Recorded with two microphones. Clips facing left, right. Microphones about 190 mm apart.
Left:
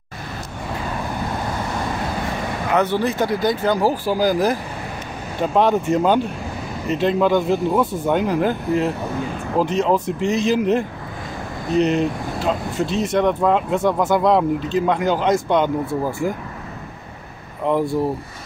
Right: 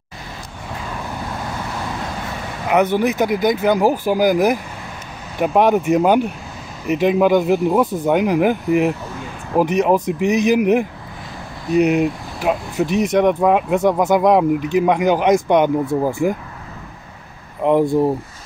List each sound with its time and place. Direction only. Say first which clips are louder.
2.7 s speech: right 4 dB; 15° right (ahead or behind)
17.6 s speech: right 4 dB; 20° right (ahead or behind)